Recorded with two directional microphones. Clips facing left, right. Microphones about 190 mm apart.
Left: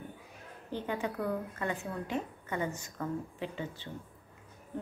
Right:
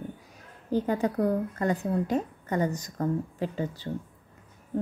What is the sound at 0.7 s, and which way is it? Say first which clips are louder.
A woman's voice: right 9 dB; 40° right (ahead or behind).